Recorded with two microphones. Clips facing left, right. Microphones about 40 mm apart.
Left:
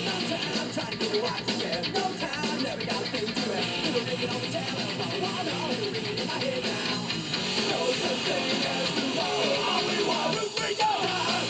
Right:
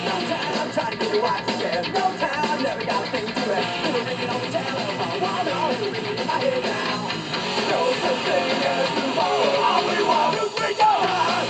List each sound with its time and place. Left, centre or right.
7.7 s speech: centre
9.2 s music: centre